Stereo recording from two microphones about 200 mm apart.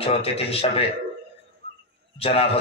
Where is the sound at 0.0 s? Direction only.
30° left (ahead or behind).